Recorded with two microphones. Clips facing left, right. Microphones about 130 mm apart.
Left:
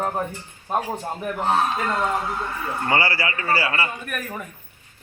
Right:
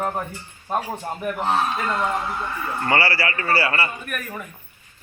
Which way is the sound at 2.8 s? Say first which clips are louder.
Right 1 dB; 20° left (ahead or behind).